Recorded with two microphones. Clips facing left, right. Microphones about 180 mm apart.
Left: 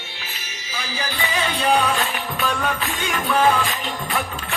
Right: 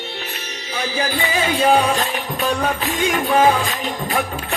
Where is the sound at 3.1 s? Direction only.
40° right (ahead or behind).